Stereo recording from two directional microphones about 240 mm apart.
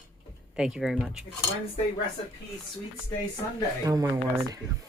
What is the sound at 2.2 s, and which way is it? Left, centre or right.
Speech, left.